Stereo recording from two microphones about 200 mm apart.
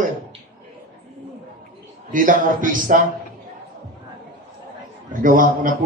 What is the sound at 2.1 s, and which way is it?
Speech, 40° right (ahead or behind).